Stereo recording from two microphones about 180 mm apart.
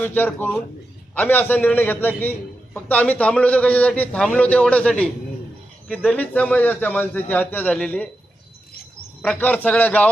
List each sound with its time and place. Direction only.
0.0 s a man's voice: 10° left (ahead or behind)
9.2 s a man's voice: 10° left (ahead or behind)